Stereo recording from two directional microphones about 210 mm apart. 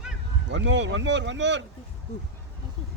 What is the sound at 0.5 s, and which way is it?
Speech, 60° right (ahead or behind).